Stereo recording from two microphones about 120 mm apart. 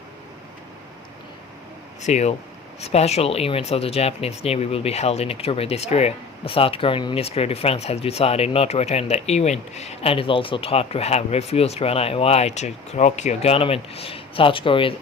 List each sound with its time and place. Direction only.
2.0 s speech: 70° left (ahead or behind); by 14.9 s 45° left (ahead or behind)